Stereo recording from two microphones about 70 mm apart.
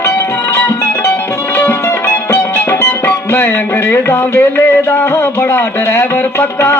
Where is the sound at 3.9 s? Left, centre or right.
Left.